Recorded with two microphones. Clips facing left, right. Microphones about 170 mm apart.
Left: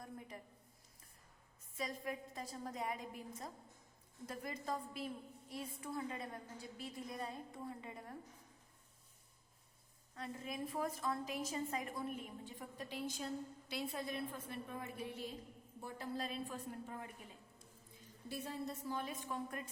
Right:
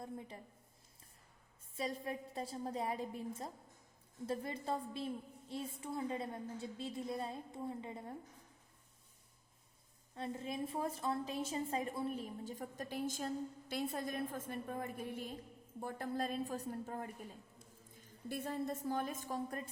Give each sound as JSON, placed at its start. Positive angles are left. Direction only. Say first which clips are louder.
{"t": 1.7, "sound": "a woman's voice", "louder": "right 3 dB", "side_deg": -30}
{"t": 10.2, "sound": "a woman's voice", "louder": "right 4 dB", "side_deg": -25}